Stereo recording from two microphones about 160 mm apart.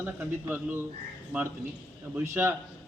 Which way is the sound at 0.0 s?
10° right (ahead or behind).